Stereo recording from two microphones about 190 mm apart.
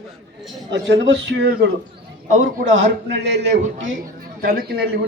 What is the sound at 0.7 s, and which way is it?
A man's voice, 70° right (ahead or behind).